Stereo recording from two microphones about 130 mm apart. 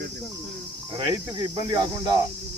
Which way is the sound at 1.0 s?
35° right (ahead or behind).